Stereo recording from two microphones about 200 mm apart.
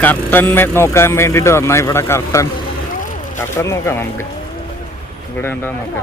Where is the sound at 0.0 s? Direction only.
10° left (ahead or behind).